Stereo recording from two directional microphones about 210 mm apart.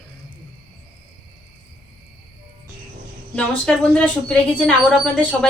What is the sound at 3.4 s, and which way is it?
A woman's voice, 5° left (ahead or behind).